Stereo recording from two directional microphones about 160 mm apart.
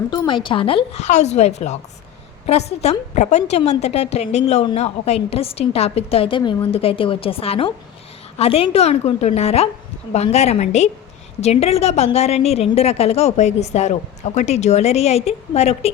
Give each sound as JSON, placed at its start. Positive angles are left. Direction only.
{"t": 0.3, "sound": "a woman's voice", "side_deg": 30}